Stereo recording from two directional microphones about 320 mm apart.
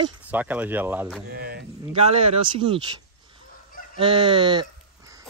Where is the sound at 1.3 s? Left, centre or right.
Right.